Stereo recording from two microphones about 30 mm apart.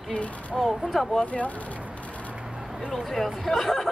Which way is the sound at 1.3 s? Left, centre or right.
Left.